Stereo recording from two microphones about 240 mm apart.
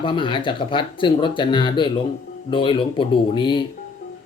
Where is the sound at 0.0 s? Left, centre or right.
Centre.